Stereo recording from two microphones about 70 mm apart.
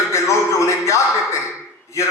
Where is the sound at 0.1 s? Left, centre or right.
Left.